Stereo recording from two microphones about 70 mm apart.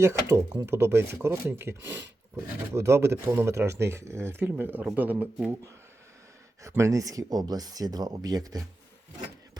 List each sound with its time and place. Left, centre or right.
0.0 s speech: right
6.6 s speech: right